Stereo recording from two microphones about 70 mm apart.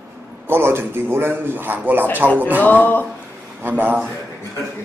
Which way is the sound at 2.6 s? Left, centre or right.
Left.